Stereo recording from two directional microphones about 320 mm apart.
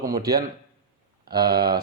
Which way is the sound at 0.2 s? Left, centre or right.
Centre.